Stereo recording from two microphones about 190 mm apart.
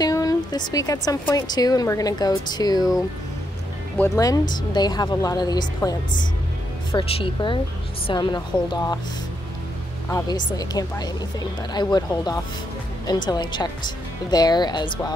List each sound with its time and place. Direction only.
0.0 s speech: 20° left (ahead or behind)
4.0 s speech: 15° left (ahead or behind)
10.0 s speech: 20° left (ahead or behind)